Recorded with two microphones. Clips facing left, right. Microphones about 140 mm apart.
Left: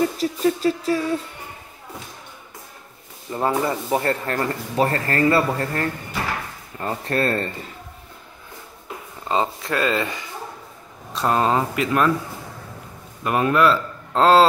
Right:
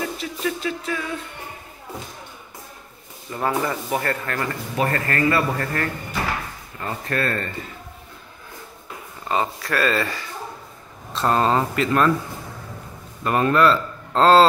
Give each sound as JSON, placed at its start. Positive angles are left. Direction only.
{"t": 0.0, "sound": "music", "side_deg": 40}
{"t": 3.3, "sound": "speech", "side_deg": 25}
{"t": 9.3, "sound": "speech", "side_deg": 20}
{"t": 13.2, "sound": "a man's voice", "side_deg": 5}